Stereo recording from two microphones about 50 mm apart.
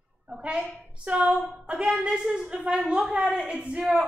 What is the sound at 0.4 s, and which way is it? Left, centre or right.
A woman's voice, centre.